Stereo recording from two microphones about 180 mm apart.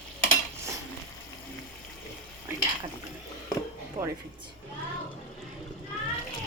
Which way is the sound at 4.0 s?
30° right (ahead or behind).